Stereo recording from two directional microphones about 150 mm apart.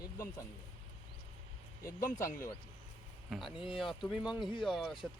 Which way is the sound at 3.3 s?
Centre (ahead or behind).